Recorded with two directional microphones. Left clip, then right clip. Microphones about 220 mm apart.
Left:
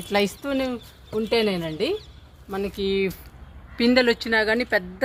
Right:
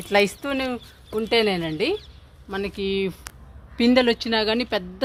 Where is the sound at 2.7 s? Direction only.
90° right.